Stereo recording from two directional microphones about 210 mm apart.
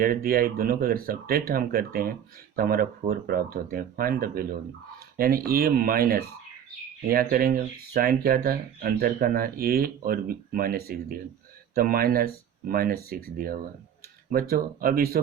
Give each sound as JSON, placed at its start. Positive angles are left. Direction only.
{"t": 0.0, "sound": "speech", "side_deg": -45}